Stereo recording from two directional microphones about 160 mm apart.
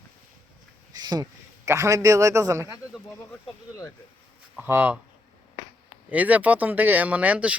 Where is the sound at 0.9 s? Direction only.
25° right (ahead or behind).